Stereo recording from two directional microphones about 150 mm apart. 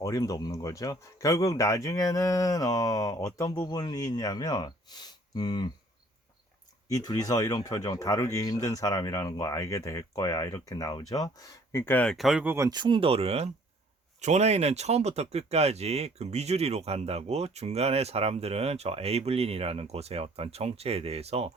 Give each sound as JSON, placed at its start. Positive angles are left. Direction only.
{"t": 0.0, "sound": "speech", "side_deg": 25}
{"t": 6.8, "sound": "speech", "side_deg": 25}
{"t": 12.1, "sound": "speech", "side_deg": -5}
{"t": 12.8, "sound": "speech", "side_deg": -35}